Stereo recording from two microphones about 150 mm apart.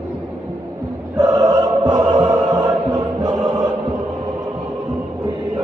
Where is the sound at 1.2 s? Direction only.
25° right (ahead or behind).